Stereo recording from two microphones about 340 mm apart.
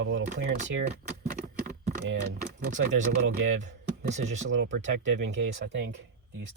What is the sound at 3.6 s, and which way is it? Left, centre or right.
Speech, right.